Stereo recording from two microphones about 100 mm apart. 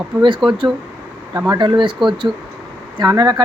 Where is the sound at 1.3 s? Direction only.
35° right (ahead or behind).